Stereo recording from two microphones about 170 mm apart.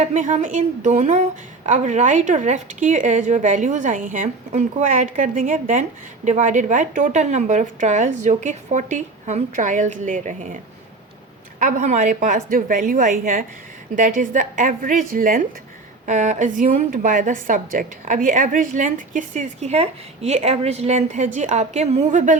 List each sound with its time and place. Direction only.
0.1 s a woman's voice: 45° right (ahead or behind)
11.6 s a woman's voice: 45° right (ahead or behind)